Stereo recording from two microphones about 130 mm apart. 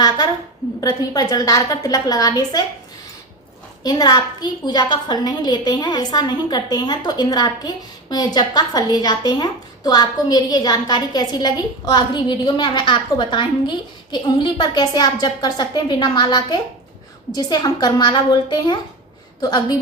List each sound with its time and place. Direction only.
0.8 s a woman's voice: 30° left (ahead or behind)
3.8 s a woman's voice: 30° left (ahead or behind)